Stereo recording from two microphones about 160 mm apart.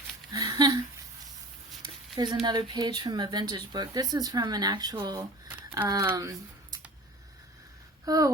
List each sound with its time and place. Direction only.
0.3 s a sound: 25° right (ahead or behind)
2.1 s speech: 25° right (ahead or behind)
8.0 s speech: 20° right (ahead or behind)